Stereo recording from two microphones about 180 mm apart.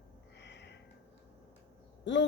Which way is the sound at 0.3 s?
75° left (ahead or behind).